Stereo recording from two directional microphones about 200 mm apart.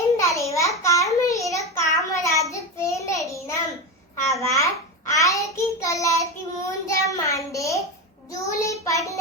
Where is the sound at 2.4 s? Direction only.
15° left (ahead or behind).